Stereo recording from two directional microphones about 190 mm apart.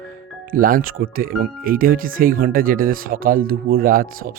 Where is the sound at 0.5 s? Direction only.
50° right (ahead or behind).